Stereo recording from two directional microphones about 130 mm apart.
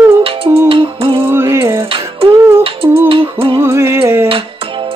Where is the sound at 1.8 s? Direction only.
45° right (ahead or behind).